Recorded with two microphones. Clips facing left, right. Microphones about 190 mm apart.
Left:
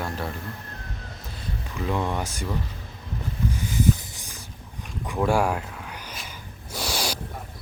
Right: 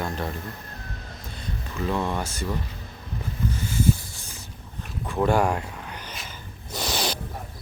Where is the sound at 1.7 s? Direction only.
5° left (ahead or behind).